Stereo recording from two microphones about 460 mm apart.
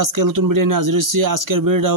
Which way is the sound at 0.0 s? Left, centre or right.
Right.